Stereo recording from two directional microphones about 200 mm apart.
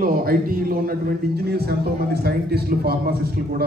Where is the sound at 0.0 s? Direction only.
45° right (ahead or behind).